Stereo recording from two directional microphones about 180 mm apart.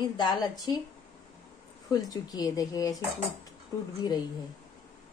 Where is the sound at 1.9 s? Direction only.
20° left (ahead or behind).